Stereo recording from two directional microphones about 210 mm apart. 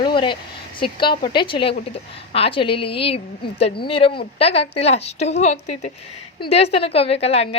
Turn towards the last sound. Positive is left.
turn(degrees=30)  # may be behind; listen again after turning